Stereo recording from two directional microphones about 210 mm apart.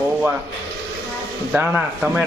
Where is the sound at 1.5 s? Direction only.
5° right (ahead or behind).